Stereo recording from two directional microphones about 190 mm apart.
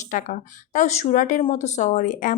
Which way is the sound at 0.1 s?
40° left (ahead or behind).